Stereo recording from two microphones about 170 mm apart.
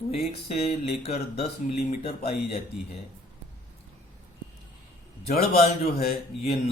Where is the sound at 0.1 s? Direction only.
35° left (ahead or behind).